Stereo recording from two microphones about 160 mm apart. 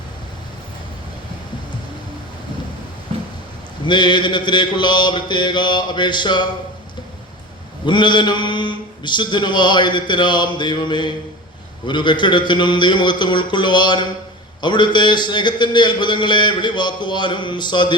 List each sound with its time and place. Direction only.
3.8 s a man's voice: 30° left (ahead or behind)
7.9 s a man's voice: 30° left (ahead or behind)